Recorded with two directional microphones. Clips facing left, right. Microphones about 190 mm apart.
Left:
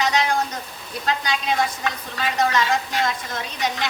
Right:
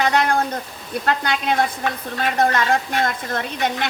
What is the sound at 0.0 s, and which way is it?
A woman's voice, 55° right (ahead or behind).